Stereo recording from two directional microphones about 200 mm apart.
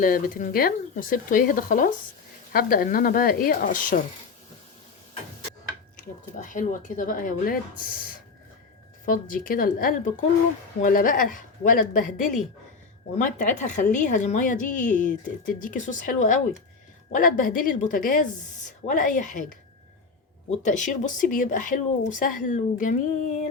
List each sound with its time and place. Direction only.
0.0 s speech: 40° left (ahead or behind)
6.4 s a woman's voice: 40° left (ahead or behind)
20.5 s a woman's voice: 35° left (ahead or behind)